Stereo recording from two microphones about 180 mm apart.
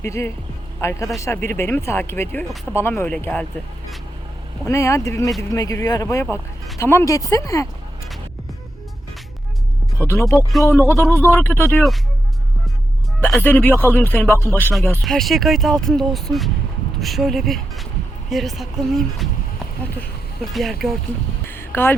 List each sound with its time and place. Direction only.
0.0 s speech: 15° left (ahead or behind)
4.6 s speech: 15° left (ahead or behind)
10.0 s speech: 15° left (ahead or behind)
10.3 s speech: centre (ahead or behind)
10.7 s speech: 15° left (ahead or behind)
13.3 s speech: 10° left (ahead or behind)
15.0 s speech: centre (ahead or behind)
21.4 s a sound: 10° left (ahead or behind)